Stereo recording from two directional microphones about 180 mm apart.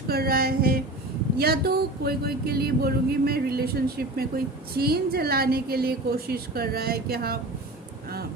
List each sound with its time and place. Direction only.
0.1 s speech: 60° right (ahead or behind)